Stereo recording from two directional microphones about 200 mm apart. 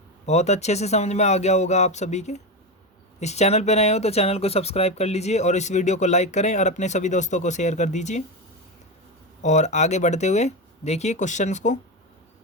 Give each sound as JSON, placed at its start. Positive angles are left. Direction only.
{"t": 0.3, "sound": "speech", "side_deg": 35}
{"t": 9.4, "sound": "speech", "side_deg": 35}